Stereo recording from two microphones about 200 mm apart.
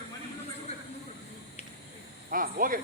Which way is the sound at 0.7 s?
30° left (ahead or behind).